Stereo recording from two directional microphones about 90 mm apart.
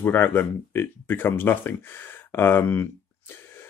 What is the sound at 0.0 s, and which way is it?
Speech, 20° left (ahead or behind).